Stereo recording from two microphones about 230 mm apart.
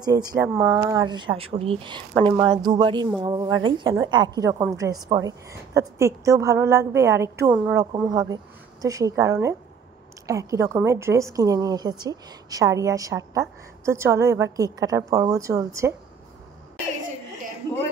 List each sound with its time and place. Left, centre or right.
0.0 s a woman's voice: centre